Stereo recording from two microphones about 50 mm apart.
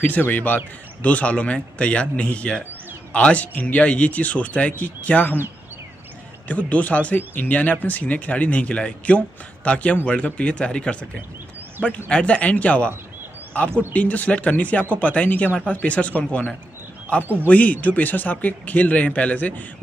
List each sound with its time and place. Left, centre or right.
0.0 s a man's voice: left
6.4 s speech: left
17.2 s speech: right
17.5 s speech: left